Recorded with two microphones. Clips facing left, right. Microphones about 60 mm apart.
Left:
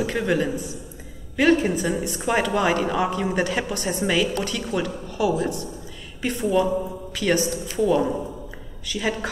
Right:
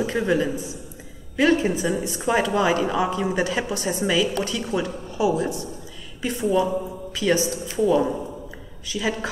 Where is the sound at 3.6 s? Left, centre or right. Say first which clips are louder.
Right 1 dB; centre.